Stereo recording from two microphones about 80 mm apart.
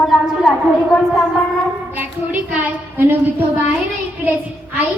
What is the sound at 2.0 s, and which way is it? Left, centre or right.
A woman's voice, right.